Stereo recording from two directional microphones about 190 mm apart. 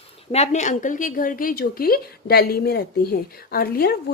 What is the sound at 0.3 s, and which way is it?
A woman's voice, 35° left (ahead or behind).